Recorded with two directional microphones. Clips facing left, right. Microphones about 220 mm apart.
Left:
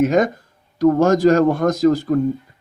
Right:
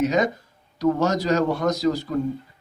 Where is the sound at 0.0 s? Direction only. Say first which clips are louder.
Left 5 dB; 50° left (ahead or behind).